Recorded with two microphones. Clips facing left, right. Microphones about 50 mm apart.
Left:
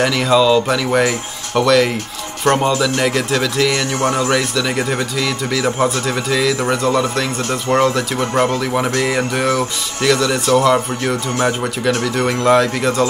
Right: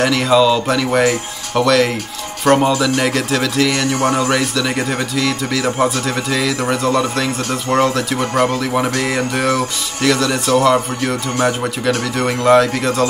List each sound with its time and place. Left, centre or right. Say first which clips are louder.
0.0 s speech: right 1 dB; centre